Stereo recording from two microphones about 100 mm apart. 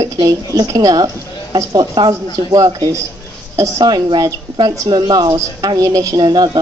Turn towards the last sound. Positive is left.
turn(degrees=-45)  # may be behind; listen again after turning